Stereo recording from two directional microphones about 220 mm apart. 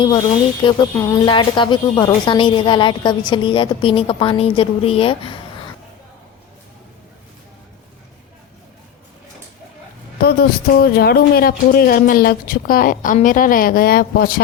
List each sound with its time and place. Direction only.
0.6 s a woman's voice: 20° left (ahead or behind)
10.2 s a woman's voice: 45° left (ahead or behind)